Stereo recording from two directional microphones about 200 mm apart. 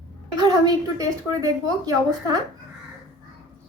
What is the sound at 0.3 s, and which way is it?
A woman's voice, 20° right (ahead or behind).